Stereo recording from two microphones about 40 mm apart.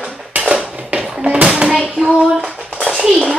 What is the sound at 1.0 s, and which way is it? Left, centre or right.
Music, right.